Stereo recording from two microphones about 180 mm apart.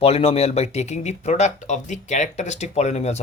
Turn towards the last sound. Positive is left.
turn(degrees=35)  # may be behind; listen again after turning